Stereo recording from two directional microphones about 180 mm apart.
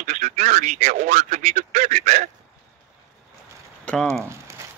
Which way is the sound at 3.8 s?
5° left (ahead or behind).